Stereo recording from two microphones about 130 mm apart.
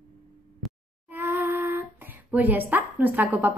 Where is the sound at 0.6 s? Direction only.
Centre (ahead or behind).